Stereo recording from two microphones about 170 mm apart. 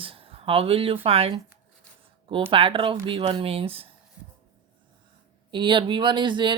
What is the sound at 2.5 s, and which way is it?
Speech, 30° right (ahead or behind).